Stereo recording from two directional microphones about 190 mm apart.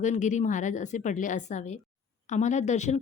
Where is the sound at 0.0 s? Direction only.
40° left (ahead or behind).